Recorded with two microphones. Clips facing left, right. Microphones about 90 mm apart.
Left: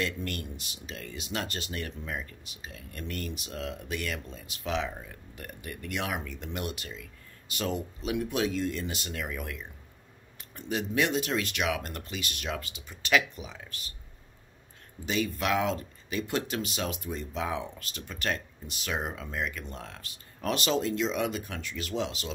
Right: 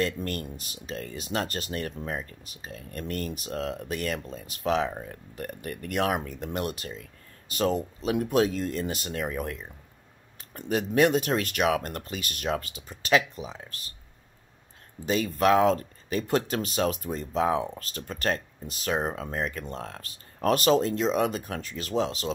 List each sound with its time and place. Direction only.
0.0 s speech: 35° right (ahead or behind)
15.0 s speech: 40° right (ahead or behind)